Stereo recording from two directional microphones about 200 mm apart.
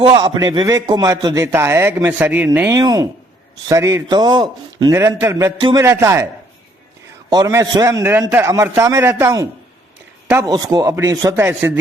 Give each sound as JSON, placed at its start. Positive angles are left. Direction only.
{"t": 0.0, "sound": "a man's voice", "side_deg": -25}
{"t": 7.3, "sound": "a man's voice", "side_deg": -15}